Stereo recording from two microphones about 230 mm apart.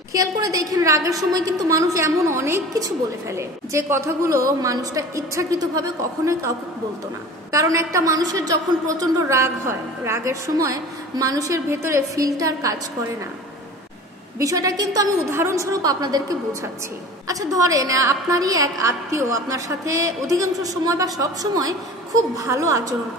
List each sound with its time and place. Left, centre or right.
0.1 s a woman's voice: centre
7.5 s a woman's voice: centre
14.4 s a woman's voice: centre